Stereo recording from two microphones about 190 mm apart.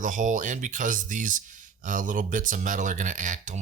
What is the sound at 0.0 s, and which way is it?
Speech, 40° right (ahead or behind).